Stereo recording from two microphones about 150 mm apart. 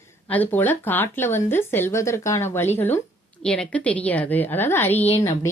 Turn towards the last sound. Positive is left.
turn(degrees=15)  # may be behind; listen again after turning